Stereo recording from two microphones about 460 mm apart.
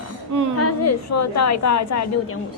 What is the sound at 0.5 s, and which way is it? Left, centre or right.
A woman's voice, left.